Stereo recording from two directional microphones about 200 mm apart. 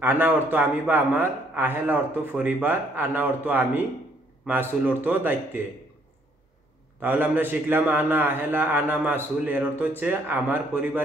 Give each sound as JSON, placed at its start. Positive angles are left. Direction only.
{"t": 0.0, "sound": "a man's voice", "side_deg": -10}
{"t": 7.0, "sound": "a man's voice", "side_deg": -10}